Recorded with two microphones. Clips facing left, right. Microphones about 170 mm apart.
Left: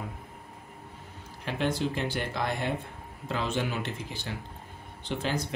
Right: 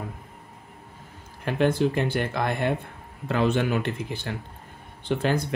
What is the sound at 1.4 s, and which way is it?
Speech, 50° right (ahead or behind).